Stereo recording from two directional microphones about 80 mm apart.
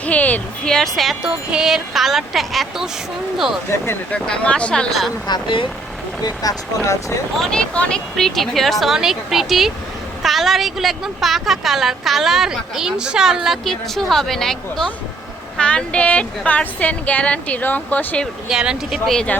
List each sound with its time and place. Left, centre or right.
0.0 s a sound: centre
0.7 s a woman's voice: centre
1.5 s a woman's voice: centre
4.1 s speech: centre
5.3 s speech: left
7.3 s a woman's voice: centre
18.4 s speech: centre